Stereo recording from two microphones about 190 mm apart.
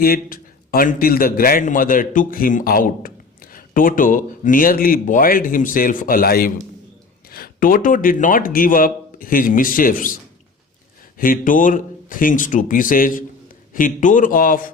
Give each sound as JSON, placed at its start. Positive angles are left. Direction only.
{"t": 0.0, "sound": "a man's voice", "side_deg": 50}
{"t": 11.2, "sound": "a man's voice", "side_deg": 45}